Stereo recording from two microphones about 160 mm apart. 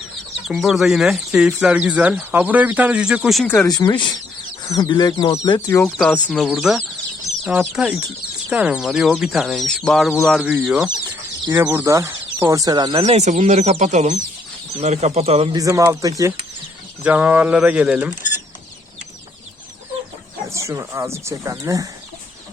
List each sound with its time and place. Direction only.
0.4 s speech: centre (ahead or behind)
3.4 s speech: 10° left (ahead or behind)
3.7 s speech: 25° left (ahead or behind)
5.8 s speech: 5° left (ahead or behind)
10.4 s speech: 10° right (ahead or behind); by 13.1 s 25° right (ahead or behind)
13.1 s speech: 45° right (ahead or behind)
15.5 s speech: 20° right (ahead or behind)
17.0 s speech: 10° right (ahead or behind)
20.5 s speech: 20° right (ahead or behind)